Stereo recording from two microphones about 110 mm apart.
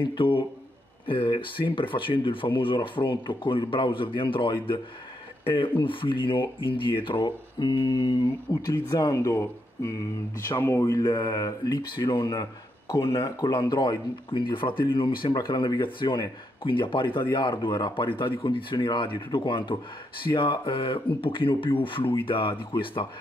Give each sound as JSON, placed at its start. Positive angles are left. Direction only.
{"t": 0.0, "sound": "speech", "side_deg": 50}
{"t": 8.7, "sound": "speech", "side_deg": 30}